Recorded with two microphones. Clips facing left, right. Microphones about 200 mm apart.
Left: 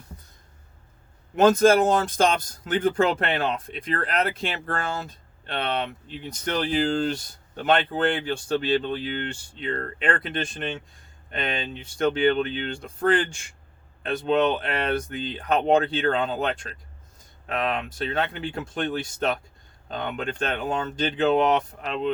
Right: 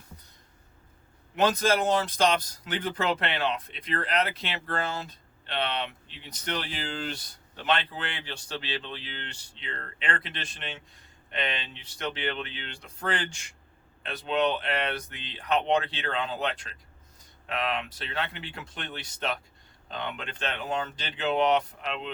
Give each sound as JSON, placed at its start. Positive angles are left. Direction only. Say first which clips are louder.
{"t": 1.4, "sound": "speech", "louder": "left 8 dB", "side_deg": 50}